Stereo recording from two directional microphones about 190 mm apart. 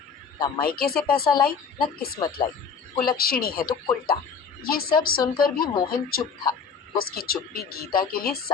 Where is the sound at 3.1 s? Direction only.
50° left (ahead or behind).